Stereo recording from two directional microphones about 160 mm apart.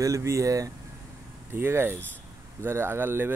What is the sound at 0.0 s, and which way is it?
Speech, 20° right (ahead or behind).